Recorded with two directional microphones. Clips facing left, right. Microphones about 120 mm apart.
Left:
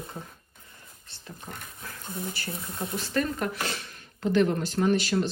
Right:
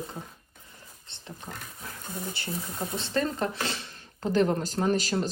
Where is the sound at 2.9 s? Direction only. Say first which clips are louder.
Even; 25° right (ahead or behind).